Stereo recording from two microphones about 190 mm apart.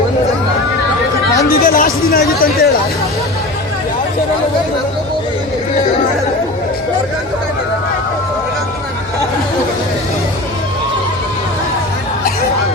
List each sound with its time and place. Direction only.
1.5 s speech: 50° left (ahead or behind)